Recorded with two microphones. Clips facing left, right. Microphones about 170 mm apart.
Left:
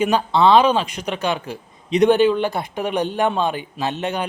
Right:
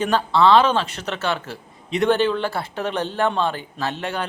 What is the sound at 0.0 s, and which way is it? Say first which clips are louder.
Speech: left 1 dB; 15° left (ahead or behind).